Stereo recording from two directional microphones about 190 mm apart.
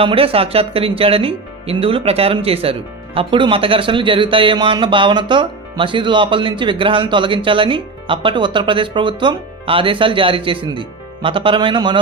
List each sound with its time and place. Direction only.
0.0 s speech: 30° right (ahead or behind)